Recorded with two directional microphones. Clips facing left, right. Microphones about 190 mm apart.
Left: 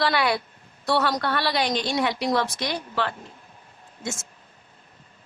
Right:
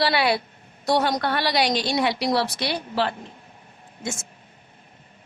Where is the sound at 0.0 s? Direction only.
30° right (ahead or behind).